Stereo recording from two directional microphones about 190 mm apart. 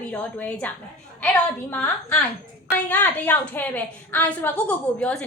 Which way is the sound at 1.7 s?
10° left (ahead or behind).